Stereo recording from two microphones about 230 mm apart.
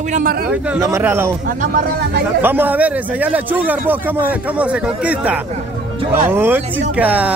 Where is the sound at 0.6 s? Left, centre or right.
Centre.